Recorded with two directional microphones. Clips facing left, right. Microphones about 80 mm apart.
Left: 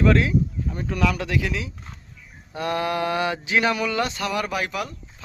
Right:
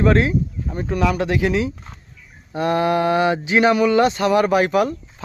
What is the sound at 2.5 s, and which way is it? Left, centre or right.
Speech, right.